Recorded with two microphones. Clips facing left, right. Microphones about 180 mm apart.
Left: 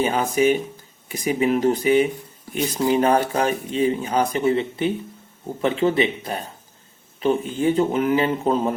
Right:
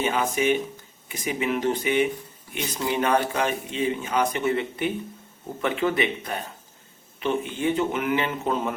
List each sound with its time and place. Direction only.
0.0 s speech: 35° left (ahead or behind)